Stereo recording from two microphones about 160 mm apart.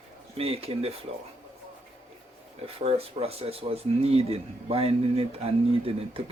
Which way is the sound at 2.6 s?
40° right (ahead or behind).